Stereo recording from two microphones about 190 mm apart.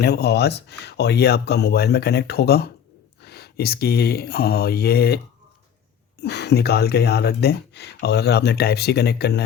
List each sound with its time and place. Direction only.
0.0 s speech: 60° left (ahead or behind)